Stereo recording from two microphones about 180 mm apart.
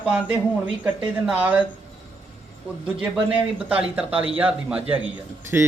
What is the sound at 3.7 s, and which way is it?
A man's voice, 5° right (ahead or behind).